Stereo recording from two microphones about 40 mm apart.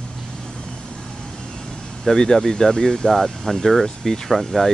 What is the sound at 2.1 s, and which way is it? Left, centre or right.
Speech, centre.